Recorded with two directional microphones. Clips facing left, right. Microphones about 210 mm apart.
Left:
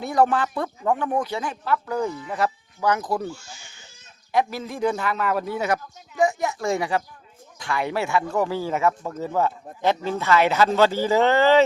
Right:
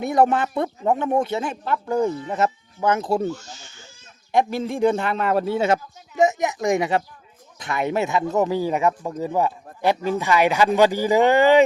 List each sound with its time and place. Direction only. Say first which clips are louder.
0.0 s speech: right 2 dB; 20° right (ahead or behind)
4.5 s speech: right 5 dB; 25° right (ahead or behind)